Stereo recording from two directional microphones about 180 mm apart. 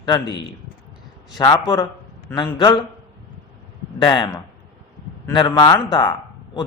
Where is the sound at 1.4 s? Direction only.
20° left (ahead or behind).